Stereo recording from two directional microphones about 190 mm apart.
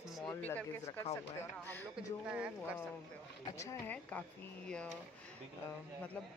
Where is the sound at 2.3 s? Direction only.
5° right (ahead or behind).